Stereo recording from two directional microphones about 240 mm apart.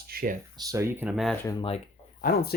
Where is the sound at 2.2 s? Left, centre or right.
Left.